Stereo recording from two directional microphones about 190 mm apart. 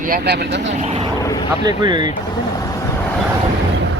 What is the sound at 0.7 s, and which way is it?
Speech, 35° right (ahead or behind).